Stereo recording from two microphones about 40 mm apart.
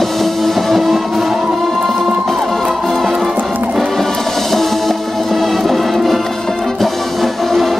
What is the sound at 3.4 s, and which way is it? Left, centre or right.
Music, right.